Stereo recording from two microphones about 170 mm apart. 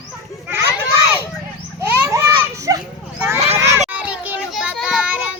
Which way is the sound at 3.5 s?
15° right (ahead or behind).